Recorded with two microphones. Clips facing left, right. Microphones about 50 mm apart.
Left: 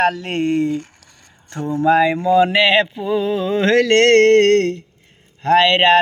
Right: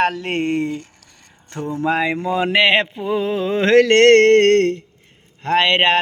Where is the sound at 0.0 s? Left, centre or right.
Right.